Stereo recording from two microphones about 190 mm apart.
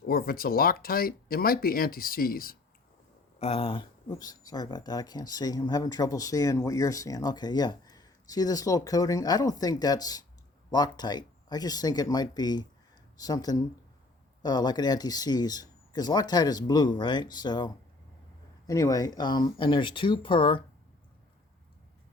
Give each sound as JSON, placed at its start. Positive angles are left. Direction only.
{"t": 0.0, "sound": "speech", "side_deg": 50}
{"t": 3.3, "sound": "speech", "side_deg": 30}
{"t": 18.7, "sound": "speech", "side_deg": 15}